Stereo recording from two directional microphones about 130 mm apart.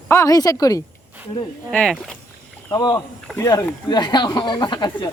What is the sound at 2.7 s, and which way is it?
Speech, 30° left (ahead or behind).